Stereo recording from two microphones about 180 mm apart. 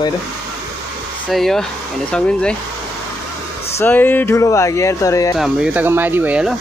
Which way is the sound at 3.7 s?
10° left (ahead or behind).